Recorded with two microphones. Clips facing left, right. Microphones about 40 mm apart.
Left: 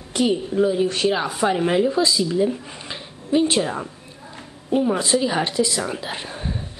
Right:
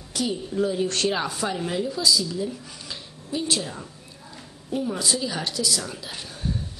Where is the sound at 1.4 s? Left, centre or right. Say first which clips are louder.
Left 8 dB; left.